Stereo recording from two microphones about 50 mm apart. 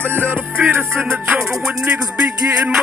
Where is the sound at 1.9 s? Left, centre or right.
Right.